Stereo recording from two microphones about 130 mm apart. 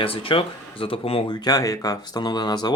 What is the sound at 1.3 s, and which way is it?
Speech, 30° left (ahead or behind).